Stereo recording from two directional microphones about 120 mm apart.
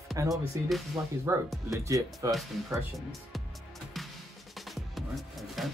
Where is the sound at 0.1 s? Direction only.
30° right (ahead or behind).